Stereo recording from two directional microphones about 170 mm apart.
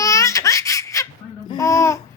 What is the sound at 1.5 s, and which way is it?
Babbling, 20° left (ahead or behind).